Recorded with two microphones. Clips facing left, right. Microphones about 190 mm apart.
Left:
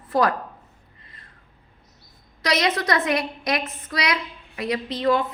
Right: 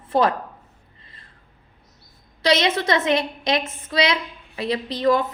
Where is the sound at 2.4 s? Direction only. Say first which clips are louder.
Right 3 dB; 25° right (ahead or behind).